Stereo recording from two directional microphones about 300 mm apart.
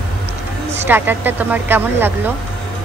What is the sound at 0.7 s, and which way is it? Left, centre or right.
A woman's voice, centre.